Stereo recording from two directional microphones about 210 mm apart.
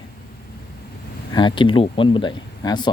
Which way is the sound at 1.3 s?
20° left (ahead or behind).